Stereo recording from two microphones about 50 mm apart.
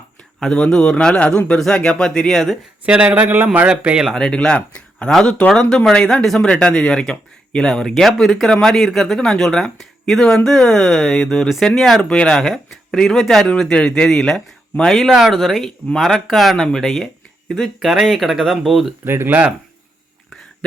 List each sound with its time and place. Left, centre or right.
0.3 s speech: centre
2.3 s speech: centre
2.8 s speech: right
3.1 s a man's voice: right
3.7 s speech: centre
4.1 s speech: centre
12.0 s speech: centre
13.4 s speech: centre
15.1 s speech: centre
19.0 s speech: right